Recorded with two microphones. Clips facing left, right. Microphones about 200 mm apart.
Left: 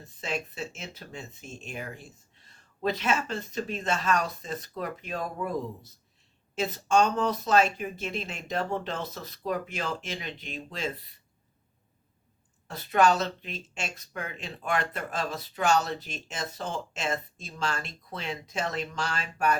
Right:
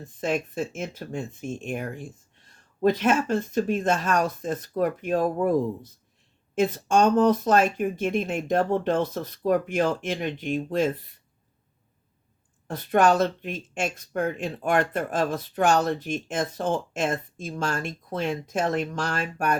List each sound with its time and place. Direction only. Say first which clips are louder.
0.0 s speech: right 7 dB; 50° right (ahead or behind)
12.6 s speech: right 3 dB; 50° right (ahead or behind)